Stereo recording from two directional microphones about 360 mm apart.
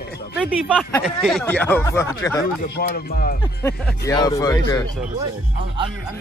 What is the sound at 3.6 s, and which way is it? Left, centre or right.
Speech, centre.